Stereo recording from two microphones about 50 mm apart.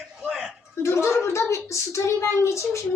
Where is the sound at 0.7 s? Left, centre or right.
Left.